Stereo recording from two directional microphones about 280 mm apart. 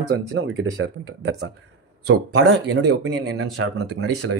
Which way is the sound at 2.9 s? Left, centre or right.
Right.